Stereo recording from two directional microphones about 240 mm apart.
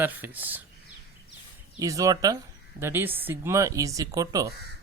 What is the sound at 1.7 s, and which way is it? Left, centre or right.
Speech, centre.